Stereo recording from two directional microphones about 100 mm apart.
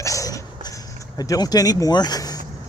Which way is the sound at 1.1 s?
40° left (ahead or behind).